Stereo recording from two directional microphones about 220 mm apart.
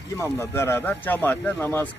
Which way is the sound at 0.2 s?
10° left (ahead or behind).